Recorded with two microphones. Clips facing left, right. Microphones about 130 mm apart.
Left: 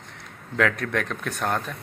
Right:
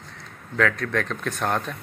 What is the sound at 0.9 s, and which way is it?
Speech, 10° left (ahead or behind).